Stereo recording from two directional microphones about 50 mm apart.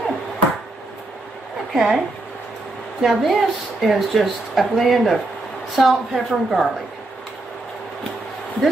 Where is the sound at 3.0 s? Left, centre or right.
Centre.